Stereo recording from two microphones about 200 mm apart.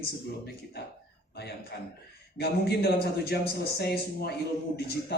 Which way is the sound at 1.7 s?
55° left (ahead or behind).